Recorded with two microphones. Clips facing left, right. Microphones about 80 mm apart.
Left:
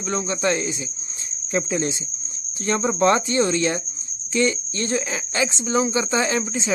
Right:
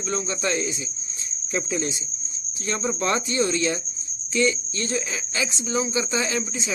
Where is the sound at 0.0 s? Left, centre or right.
Left.